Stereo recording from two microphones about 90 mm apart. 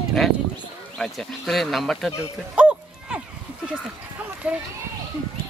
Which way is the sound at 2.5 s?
10° right (ahead or behind).